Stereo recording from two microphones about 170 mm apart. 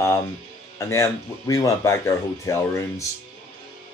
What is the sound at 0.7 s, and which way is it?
Speech, 15° left (ahead or behind).